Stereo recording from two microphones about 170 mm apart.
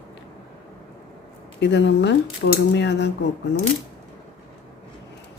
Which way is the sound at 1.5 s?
90° left.